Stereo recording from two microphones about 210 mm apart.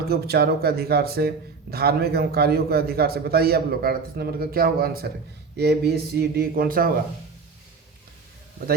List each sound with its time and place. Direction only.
0.1 s a man's voice: 50° right (ahead or behind)